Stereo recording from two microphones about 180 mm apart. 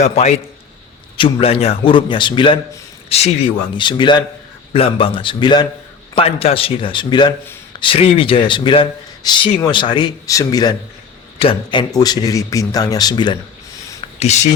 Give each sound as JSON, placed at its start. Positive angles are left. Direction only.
{"t": 0.0, "sound": "a man's voice", "side_deg": 40}
{"t": 14.2, "sound": "speech", "side_deg": 40}